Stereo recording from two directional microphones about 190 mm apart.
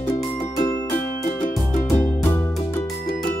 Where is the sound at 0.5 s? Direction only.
20° left (ahead or behind).